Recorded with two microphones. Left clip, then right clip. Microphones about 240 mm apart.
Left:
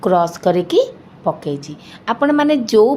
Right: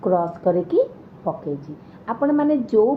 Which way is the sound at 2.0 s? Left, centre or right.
Left.